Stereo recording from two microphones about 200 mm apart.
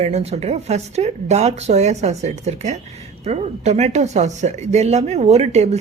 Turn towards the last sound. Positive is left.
turn(degrees=-35)  # may be behind; listen again after turning